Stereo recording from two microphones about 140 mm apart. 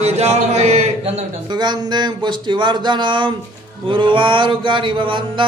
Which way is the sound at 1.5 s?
30° right (ahead or behind).